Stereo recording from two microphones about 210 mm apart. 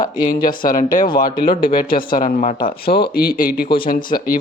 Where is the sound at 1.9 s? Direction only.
40° left (ahead or behind).